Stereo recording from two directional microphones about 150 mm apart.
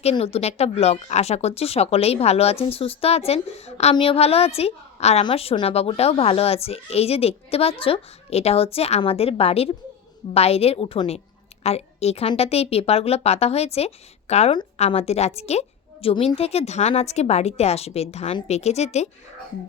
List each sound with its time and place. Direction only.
0.0 s a child's voice: 45° left (ahead or behind)